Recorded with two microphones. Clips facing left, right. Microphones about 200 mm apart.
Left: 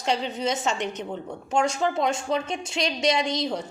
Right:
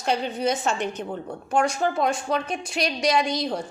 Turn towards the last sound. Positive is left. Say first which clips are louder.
# right 2 dB
turn(degrees=25)  # may be behind; listen again after turning